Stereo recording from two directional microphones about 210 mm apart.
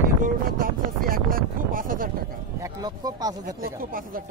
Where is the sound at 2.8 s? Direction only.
15° right (ahead or behind).